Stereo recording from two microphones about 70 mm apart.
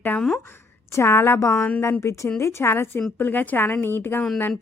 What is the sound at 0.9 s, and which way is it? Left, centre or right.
A woman's voice, left.